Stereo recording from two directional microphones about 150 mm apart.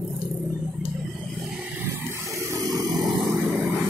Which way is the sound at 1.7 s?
20° right (ahead or behind).